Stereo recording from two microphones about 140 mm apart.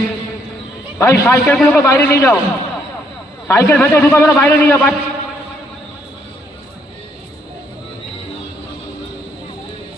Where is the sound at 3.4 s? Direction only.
15° left (ahead or behind).